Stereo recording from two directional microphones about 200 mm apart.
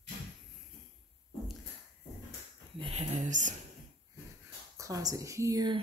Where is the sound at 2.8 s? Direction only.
30° right (ahead or behind).